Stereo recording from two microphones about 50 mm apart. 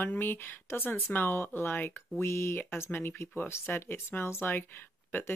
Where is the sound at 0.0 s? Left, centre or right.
Left.